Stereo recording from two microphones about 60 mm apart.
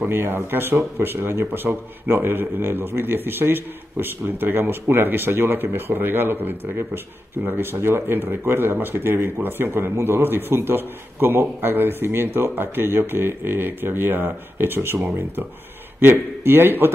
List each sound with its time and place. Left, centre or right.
0.1 s speech: right